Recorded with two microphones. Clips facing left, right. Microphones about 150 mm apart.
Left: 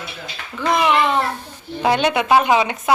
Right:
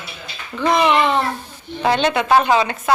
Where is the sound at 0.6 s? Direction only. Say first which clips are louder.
Right 2 dB; 5° left (ahead or behind).